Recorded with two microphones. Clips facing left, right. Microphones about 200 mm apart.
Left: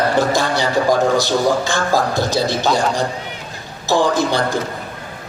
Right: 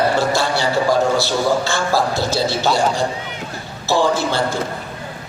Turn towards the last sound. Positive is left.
turn(degrees=15)  # may be behind; listen again after turning